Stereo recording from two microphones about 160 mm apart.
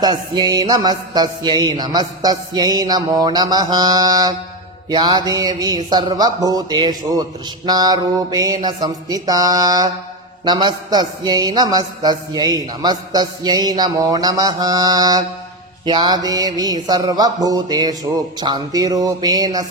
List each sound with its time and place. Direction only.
0.0 s speech: 25° right (ahead or behind)